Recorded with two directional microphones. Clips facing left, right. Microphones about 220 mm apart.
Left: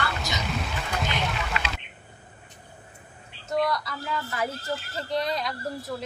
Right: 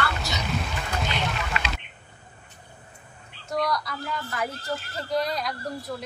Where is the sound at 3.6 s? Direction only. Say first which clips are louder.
Even; centre (ahead or behind).